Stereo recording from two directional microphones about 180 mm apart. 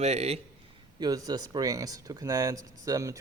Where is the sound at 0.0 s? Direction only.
35° right (ahead or behind).